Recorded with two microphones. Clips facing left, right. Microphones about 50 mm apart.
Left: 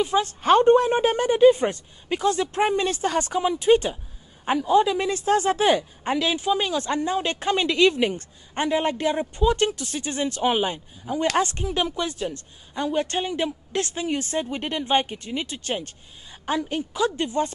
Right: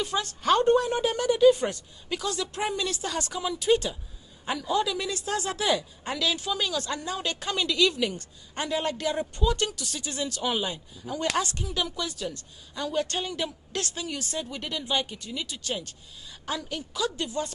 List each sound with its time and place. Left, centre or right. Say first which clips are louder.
0.0 s a woman's voice: left 6 dB; left